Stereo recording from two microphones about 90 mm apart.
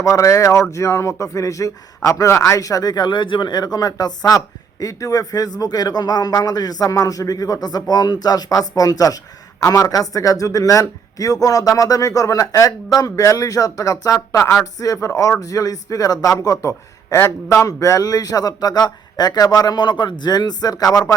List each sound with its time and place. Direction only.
0.0 s a man's voice: 35° left (ahead or behind)